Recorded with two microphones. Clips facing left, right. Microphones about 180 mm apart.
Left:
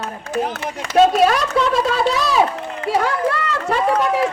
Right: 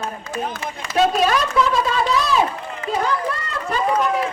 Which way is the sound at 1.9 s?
70° left (ahead or behind).